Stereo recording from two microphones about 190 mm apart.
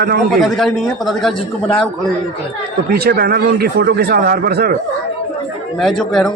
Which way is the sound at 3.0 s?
55° right (ahead or behind).